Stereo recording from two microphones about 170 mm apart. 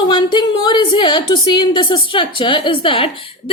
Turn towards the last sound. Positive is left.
turn(degrees=30)  # may be behind; listen again after turning